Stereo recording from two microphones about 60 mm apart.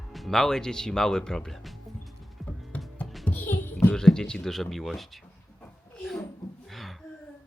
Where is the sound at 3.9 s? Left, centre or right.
Centre.